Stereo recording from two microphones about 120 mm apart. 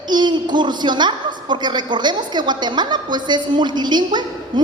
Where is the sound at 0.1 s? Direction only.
40° right (ahead or behind).